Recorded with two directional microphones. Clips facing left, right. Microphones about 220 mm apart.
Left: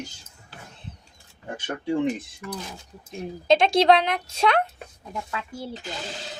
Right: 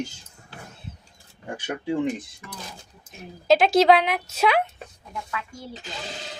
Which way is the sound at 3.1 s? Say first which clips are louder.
Right 1 dB; 5° right (ahead or behind).